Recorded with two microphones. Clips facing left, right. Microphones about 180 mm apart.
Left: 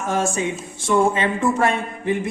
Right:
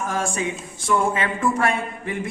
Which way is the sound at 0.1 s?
25° left (ahead or behind).